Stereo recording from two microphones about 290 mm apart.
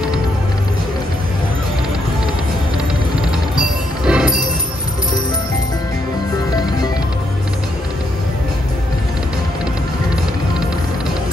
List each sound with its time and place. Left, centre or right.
4.0 s music: centre